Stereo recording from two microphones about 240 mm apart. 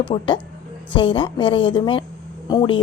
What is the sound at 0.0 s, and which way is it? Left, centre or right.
A woman's voice, centre.